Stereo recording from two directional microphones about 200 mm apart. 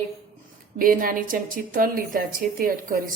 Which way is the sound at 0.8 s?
45° right (ahead or behind).